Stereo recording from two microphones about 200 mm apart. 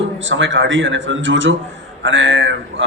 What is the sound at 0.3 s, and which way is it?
Speech, 70° right (ahead or behind).